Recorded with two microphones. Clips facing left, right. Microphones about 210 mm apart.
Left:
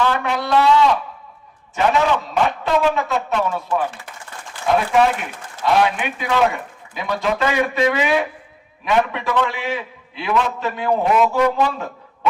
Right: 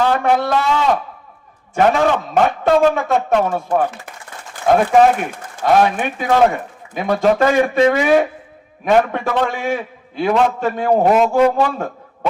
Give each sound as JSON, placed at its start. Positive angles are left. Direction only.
{"t": 0.1, "sound": "a man's voice", "side_deg": -50}
{"t": 11.3, "sound": "a man's voice", "side_deg": -30}